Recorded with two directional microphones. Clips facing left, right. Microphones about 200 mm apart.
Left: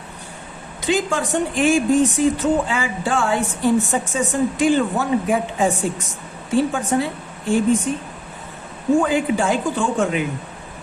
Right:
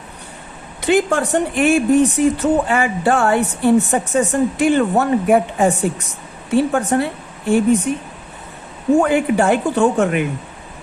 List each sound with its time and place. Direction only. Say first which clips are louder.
0.8 s a woman's voice: right 5 dB; 60° right (ahead or behind)
9.0 s a woman's voice: right 4 dB; 60° right (ahead or behind)